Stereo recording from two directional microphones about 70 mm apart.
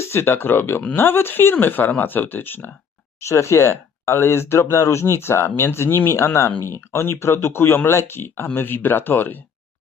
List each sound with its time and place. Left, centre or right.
0.0 s speech: left
3.2 s speech: left